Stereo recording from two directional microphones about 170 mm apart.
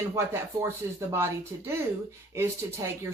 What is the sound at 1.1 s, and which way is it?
Speech, 15° right (ahead or behind).